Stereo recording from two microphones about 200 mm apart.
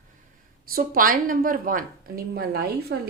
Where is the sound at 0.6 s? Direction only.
45° right (ahead or behind).